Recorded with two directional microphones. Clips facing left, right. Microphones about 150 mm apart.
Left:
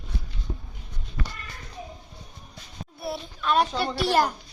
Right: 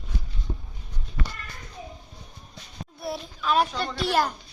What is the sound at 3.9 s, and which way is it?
Speech, 10° left (ahead or behind).